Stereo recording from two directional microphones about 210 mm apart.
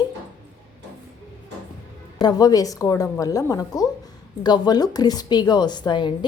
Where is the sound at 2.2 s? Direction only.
20° left (ahead or behind).